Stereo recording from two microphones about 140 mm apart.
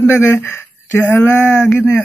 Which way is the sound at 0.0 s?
15° left (ahead or behind).